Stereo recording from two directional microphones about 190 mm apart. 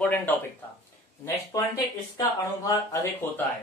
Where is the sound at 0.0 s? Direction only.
10° left (ahead or behind).